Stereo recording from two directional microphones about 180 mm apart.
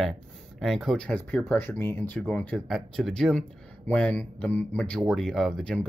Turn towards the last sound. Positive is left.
turn(degrees=0)  # may be behind; listen again after turning